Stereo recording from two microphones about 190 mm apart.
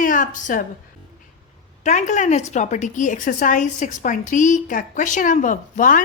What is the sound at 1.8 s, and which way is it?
A woman's voice, 40° left (ahead or behind).